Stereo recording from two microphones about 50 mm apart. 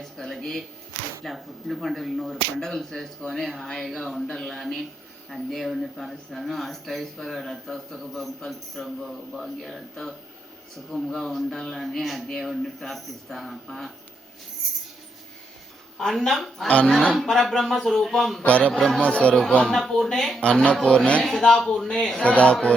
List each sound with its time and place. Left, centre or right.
0.0 s speech: centre
16.0 s speech: centre
16.6 s speech: left
17.2 s speech: centre
18.4 s speech: left
18.7 s speech: centre
18.9 s speech: left
19.6 s speech: centre
20.4 s speech: left
21.2 s speech: centre
22.2 s speech: left